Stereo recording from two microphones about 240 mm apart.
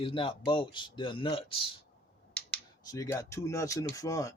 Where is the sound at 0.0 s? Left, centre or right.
Left.